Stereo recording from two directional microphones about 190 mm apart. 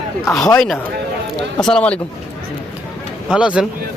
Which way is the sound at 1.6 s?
5° left (ahead or behind).